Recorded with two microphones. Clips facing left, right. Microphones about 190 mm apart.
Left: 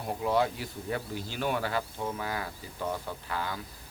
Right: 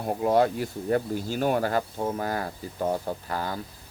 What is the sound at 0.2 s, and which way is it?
Speech, 45° right (ahead or behind).